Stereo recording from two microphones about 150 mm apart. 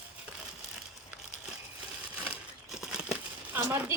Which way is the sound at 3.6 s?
15° right (ahead or behind).